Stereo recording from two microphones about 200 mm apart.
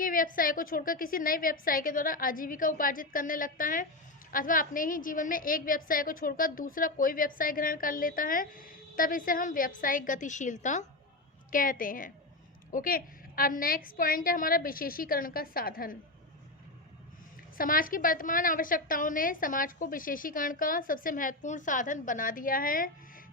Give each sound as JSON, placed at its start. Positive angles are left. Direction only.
{"t": 0.0, "sound": "a woman's voice", "side_deg": 45}
{"t": 17.6, "sound": "a woman's voice", "side_deg": 45}